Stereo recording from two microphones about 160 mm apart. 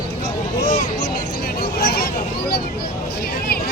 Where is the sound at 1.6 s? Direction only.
90° left.